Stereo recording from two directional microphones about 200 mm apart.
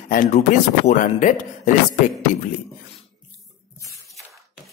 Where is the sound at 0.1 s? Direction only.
40° left (ahead or behind).